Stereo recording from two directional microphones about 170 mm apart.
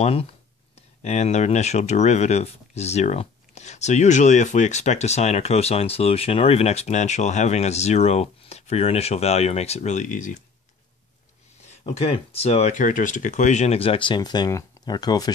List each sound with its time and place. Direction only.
0.0 s speech: 35° left (ahead or behind)
11.8 s speech: 35° left (ahead or behind)